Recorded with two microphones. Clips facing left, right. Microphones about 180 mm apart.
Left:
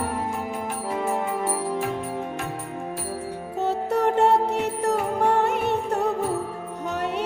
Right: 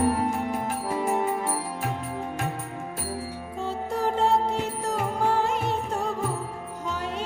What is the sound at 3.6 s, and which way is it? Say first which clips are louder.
Music: left 5 dB; 70° left (ahead or behind).